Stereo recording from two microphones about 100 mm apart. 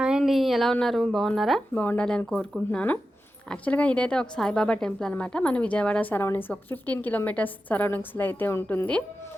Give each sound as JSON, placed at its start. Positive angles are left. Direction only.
{"t": 0.0, "sound": "speech", "side_deg": -5}
{"t": 1.7, "sound": "a woman's voice", "side_deg": 15}